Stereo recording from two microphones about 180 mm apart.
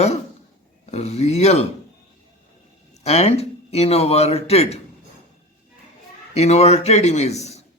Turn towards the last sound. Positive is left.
turn(degrees=35)  # may be behind; listen again after turning